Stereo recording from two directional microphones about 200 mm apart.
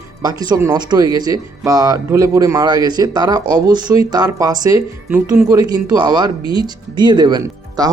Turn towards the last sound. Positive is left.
turn(degrees=-20)  # may be behind; listen again after turning